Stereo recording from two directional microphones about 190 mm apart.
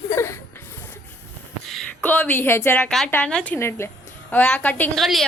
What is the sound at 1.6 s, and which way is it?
A woman's voice, 5° left (ahead or behind).